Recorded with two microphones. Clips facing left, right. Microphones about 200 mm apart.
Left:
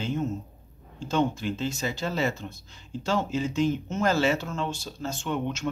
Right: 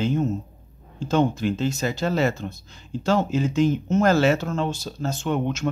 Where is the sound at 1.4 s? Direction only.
70° right (ahead or behind).